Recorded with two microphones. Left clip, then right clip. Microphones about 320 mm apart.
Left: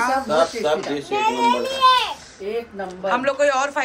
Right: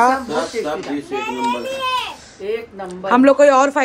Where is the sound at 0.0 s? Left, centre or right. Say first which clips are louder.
Right 2 dB; centre.